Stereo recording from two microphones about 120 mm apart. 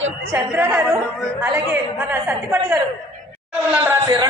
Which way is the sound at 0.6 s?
20° right (ahead or behind).